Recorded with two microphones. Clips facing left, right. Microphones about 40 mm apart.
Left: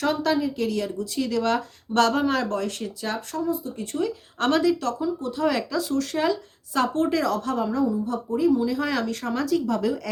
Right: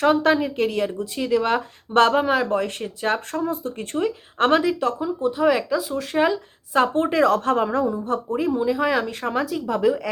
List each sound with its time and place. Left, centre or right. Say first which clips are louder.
0.0 s speech: right 5 dB; right
3.9 s a woman's voice: right 3 dB; right
7.3 s a woman's voice: right 4 dB; right